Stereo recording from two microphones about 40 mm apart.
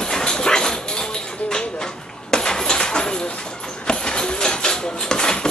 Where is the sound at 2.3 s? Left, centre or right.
Centre.